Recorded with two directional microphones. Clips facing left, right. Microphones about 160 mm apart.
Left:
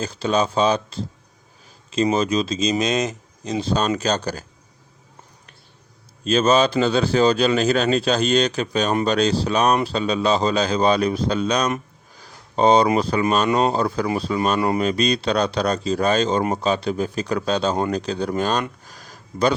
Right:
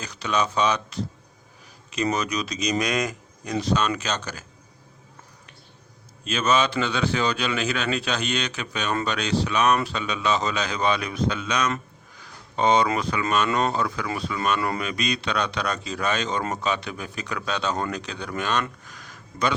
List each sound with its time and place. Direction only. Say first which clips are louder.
0.0 s a man's voice: left 5 dB; 30° left (ahead or behind)
2.1 s speech: left 7 dB; 25° left (ahead or behind)
6.2 s a man's voice: left 6 dB; 35° left (ahead or behind)
12.2 s a sound: left 5 dB; 35° left (ahead or behind)
13.0 s a man's voice: left 5 dB; 35° left (ahead or behind)
18.9 s a sound: left 3 dB; 35° left (ahead or behind)